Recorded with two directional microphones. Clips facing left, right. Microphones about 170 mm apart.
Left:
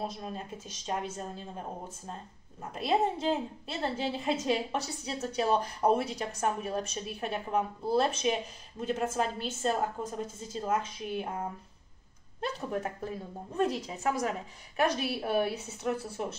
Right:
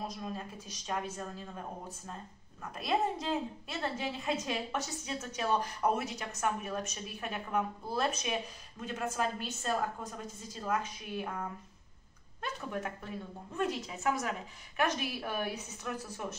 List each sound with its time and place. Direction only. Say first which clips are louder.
0.0 s a woman's voice: left 2 dB; 30° left (ahead or behind)
2.6 s a woman's voice: left 4 dB; 30° left (ahead or behind)